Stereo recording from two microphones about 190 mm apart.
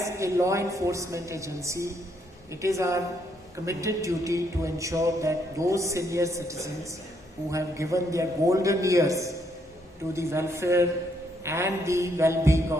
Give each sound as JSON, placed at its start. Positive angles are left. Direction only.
{"t": 0.0, "sound": "music", "side_deg": -15}